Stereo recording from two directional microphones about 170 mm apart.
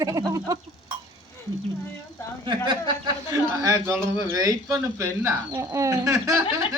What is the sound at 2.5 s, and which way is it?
A woman's voice, 25° right (ahead or behind).